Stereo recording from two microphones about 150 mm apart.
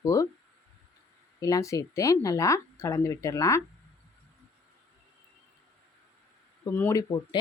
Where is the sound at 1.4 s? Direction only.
25° left (ahead or behind).